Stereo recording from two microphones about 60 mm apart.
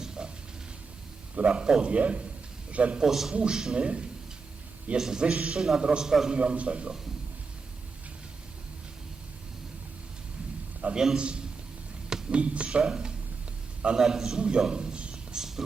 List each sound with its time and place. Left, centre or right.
0.2 s a sound: centre
1.4 s a man's voice: centre
3.0 s a man's voice: centre
6.3 s a man's voice: centre
10.9 s a man's voice: centre
14.6 s a sound: centre